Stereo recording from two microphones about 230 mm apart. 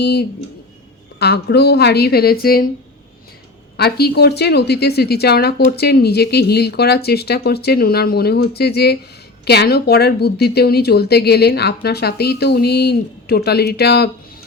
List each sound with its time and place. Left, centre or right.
0.0 s speech: left
3.8 s speech: left